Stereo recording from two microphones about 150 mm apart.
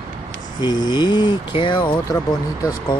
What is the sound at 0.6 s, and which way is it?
Speech, 30° left (ahead or behind).